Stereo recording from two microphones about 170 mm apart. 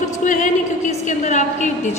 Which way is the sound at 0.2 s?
50° left (ahead or behind).